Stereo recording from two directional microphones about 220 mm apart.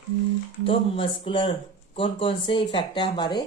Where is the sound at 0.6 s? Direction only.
25° left (ahead or behind).